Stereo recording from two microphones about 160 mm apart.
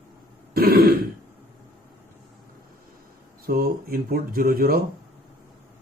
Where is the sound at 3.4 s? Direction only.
70° right (ahead or behind).